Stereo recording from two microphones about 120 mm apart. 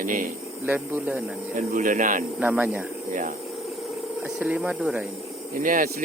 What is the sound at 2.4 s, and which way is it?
Speech, 15° right (ahead or behind).